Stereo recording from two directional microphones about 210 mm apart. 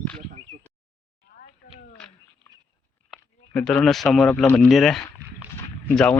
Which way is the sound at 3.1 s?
5° left (ahead or behind).